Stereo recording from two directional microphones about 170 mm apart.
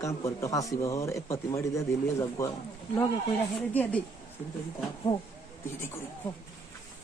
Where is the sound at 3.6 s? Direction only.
5° left (ahead or behind).